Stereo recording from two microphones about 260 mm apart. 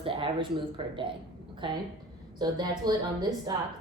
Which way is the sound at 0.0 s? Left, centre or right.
Centre.